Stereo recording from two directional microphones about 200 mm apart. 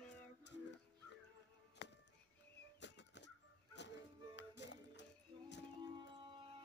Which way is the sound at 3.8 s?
60° left (ahead or behind).